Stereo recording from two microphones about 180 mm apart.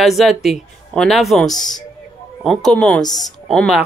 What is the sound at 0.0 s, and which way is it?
Speech, centre (ahead or behind).